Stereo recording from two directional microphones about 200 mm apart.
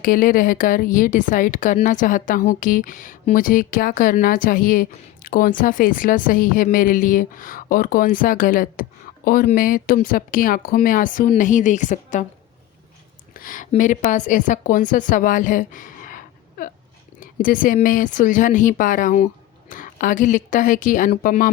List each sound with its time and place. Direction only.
0.0 s speech: 45° left (ahead or behind)
13.3 s a woman's voice: 45° left (ahead or behind)